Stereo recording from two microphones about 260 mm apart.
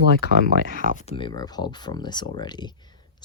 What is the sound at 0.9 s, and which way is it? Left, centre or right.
Speech, left.